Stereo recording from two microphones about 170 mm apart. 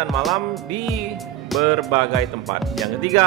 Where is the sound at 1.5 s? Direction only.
Centre (ahead or behind).